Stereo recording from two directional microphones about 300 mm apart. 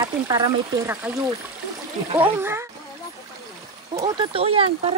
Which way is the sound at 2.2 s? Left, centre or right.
Centre.